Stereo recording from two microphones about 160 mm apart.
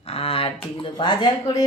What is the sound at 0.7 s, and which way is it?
Speech, 30° left (ahead or behind).